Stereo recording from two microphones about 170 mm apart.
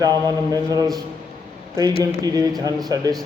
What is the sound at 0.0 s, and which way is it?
Speech, 20° right (ahead or behind).